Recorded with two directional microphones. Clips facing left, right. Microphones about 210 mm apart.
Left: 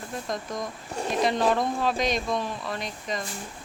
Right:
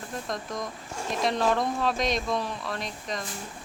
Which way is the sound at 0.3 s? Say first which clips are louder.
Left 2 dB; centre (ahead or behind).